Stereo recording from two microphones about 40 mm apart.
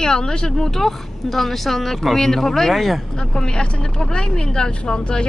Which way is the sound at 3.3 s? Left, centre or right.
Left.